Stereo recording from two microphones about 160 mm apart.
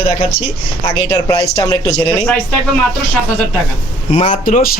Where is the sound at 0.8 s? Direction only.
25° left (ahead or behind).